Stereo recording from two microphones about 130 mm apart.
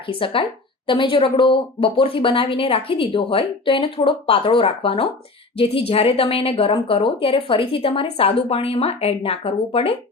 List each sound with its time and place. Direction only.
0.1 s speech: 45° left (ahead or behind)